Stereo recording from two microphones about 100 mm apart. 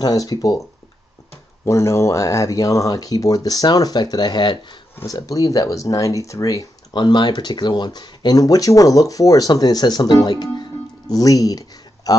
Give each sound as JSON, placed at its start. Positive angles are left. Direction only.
{"t": 0.0, "sound": "speech", "side_deg": 35}
{"t": 5.0, "sound": "speech", "side_deg": 35}